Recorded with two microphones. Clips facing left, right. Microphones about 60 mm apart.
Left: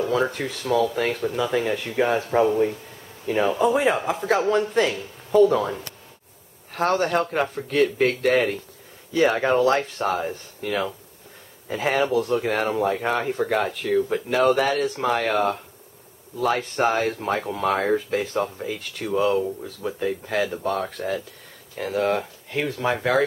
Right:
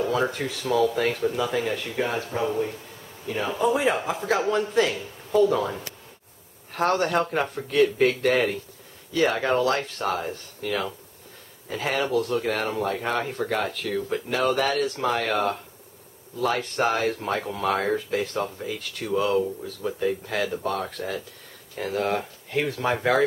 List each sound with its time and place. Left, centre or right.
0.0 s speech: centre
2.0 s speech: left
3.4 s speech: centre
9.1 s speech: centre